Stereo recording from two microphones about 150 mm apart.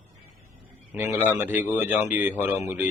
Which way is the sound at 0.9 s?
15° right (ahead or behind).